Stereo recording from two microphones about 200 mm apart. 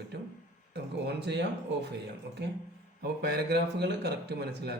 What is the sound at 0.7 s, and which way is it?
Speech, 60° right (ahead or behind).